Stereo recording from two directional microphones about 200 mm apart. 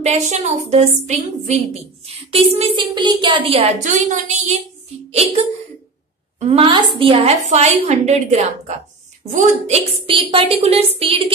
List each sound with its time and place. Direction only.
0.0 s a woman's voice: 35° right (ahead or behind)
6.4 s a woman's voice: 30° right (ahead or behind)
10.0 s a woman's voice: 25° right (ahead or behind)